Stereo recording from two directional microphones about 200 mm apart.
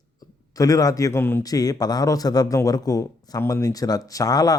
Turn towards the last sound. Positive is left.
turn(degrees=20)  # may be behind; listen again after turning